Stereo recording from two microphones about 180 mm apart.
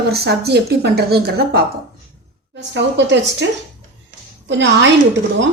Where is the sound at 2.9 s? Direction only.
80° right.